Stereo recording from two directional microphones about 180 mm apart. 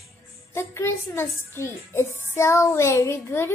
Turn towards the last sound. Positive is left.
turn(degrees=15)  # may be behind; listen again after turning